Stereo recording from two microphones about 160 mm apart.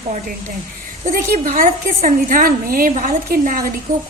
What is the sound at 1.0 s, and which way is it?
A woman's voice, 55° right (ahead or behind).